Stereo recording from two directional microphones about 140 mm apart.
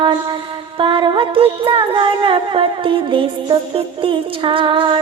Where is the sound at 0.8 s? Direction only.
40° right (ahead or behind).